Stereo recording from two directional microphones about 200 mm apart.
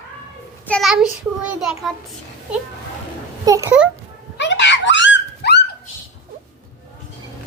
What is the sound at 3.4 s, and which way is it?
Speech, 15° right (ahead or behind).